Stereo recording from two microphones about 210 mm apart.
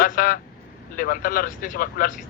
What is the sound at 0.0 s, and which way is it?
Speech, 40° left (ahead or behind).